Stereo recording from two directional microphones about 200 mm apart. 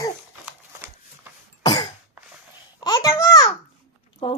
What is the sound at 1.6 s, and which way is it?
Throat clearing, 20° left (ahead or behind).